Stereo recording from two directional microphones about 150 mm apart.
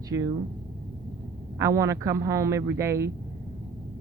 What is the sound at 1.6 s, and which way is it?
Speech, 20° right (ahead or behind).